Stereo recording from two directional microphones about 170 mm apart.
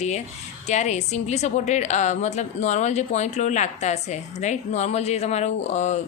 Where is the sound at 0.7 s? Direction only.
40° left (ahead or behind).